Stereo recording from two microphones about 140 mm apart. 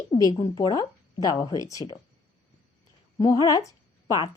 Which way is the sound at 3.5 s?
25° left (ahead or behind).